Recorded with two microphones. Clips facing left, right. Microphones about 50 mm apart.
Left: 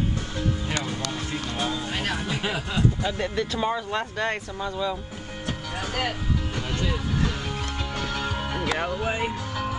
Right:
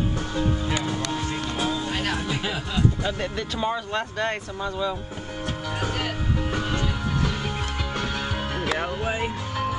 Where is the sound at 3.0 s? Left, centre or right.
Centre.